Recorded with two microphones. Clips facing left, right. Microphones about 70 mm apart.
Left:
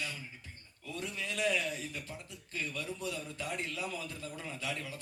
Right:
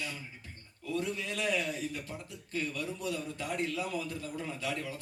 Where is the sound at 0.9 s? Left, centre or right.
Right.